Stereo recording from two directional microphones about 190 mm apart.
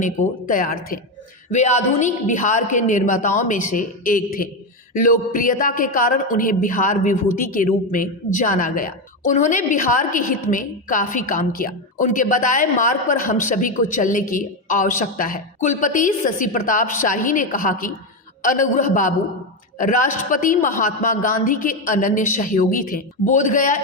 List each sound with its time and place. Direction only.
0.0 s a woman's voice: 45° left (ahead or behind)